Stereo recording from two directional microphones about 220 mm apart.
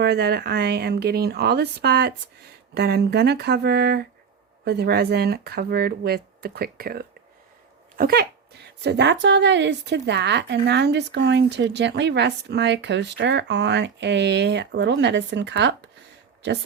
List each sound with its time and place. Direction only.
0.0 s speech: 45° right (ahead or behind)